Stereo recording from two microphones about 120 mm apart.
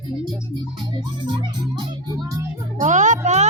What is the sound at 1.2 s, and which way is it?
Music, 40° right (ahead or behind).